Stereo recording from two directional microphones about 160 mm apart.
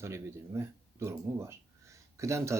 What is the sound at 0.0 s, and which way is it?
Speech, 15° right (ahead or behind).